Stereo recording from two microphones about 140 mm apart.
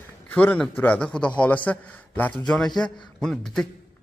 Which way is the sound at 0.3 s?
10° left (ahead or behind).